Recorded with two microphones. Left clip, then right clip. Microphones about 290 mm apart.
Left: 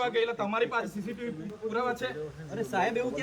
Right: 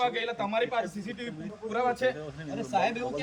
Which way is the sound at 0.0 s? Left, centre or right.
Centre.